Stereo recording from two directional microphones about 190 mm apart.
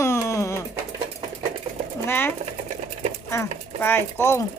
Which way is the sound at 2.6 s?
35° right (ahead or behind).